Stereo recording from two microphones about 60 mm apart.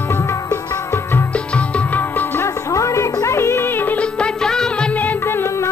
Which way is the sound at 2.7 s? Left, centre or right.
Left.